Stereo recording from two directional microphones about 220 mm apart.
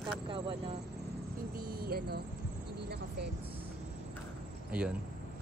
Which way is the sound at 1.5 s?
40° right (ahead or behind).